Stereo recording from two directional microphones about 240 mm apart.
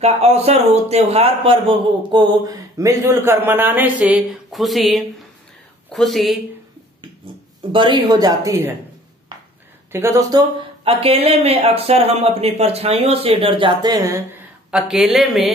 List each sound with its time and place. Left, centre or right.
0.0 s a man's voice: right; by 6.4 s centre
7.7 s a man's voice: centre
9.9 s a man's voice: centre
10.8 s speech: right; by 15.5 s centre